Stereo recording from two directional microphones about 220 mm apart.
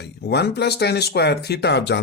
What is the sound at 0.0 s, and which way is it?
Speech, 50° left (ahead or behind).